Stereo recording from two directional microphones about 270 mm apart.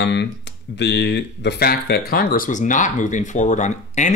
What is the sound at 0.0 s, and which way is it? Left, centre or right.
Speech, left.